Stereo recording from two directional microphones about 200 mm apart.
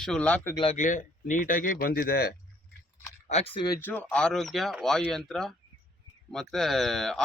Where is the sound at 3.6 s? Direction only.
15° left (ahead or behind).